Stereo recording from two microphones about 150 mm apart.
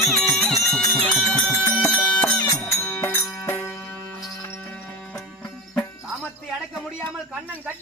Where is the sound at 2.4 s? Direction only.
20° left (ahead or behind).